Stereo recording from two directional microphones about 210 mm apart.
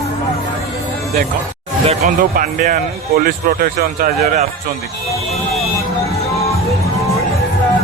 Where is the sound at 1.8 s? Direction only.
40° right (ahead or behind).